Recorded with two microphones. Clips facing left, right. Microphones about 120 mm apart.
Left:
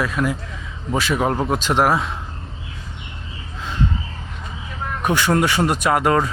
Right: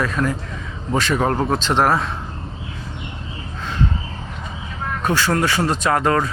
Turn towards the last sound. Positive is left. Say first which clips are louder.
# left 1 dB
turn(degrees=15)  # may be behind; listen again after turning